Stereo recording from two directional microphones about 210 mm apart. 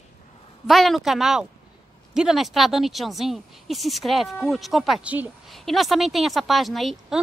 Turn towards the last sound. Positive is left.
turn(degrees=0)  # may be behind; listen again after turning